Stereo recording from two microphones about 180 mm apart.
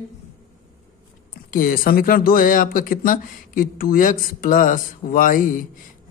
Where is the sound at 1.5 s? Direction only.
55° left (ahead or behind).